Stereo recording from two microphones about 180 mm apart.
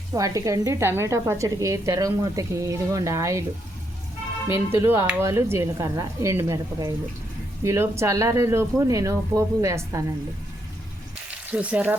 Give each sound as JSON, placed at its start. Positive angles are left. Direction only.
{"t": 0.1, "sound": "a woman's voice", "side_deg": -20}
{"t": 4.4, "sound": "a woman's voice", "side_deg": -15}
{"t": 11.5, "sound": "a woman's voice", "side_deg": -5}